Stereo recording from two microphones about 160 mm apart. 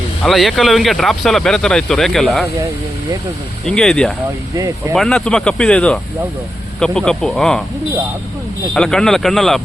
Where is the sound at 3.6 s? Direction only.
5° left (ahead or behind).